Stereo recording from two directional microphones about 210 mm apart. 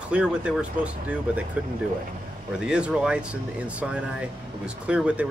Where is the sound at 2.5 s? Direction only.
5° right (ahead or behind).